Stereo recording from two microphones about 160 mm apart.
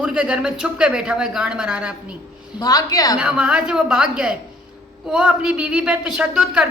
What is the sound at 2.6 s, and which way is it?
Speech, 25° left (ahead or behind).